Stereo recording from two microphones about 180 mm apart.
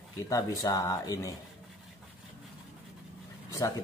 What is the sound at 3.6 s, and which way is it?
Speech, 20° left (ahead or behind).